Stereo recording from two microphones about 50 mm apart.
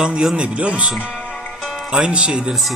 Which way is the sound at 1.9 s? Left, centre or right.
Centre.